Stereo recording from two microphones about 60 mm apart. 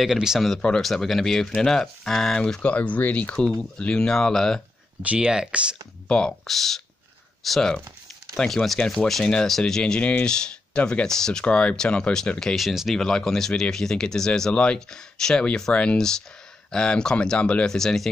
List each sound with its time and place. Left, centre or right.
0.0 s speech: centre
0.6 s speech: centre
0.8 s speech: centre; by 3.3 s left
3.7 s speech: centre
5.2 s speech: centre
6.0 s speech: centre
6.4 s speech: centre
9.9 s speech: left
11.1 s speech: centre
12.5 s speech: centre
17.7 s speech: centre